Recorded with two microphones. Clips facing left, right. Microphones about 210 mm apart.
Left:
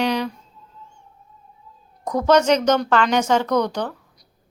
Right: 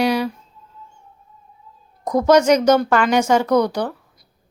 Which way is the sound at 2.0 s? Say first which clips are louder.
Right 3 dB; 10° right (ahead or behind).